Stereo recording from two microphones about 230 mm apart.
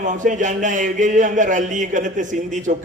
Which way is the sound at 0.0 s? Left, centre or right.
Right.